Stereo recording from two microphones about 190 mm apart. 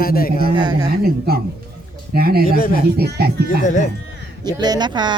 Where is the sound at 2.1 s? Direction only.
55° right (ahead or behind).